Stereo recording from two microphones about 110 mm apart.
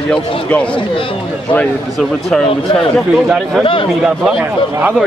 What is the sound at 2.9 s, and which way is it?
Speech, centre (ahead or behind).